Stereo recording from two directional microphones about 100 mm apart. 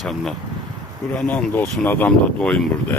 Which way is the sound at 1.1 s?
15° left (ahead or behind).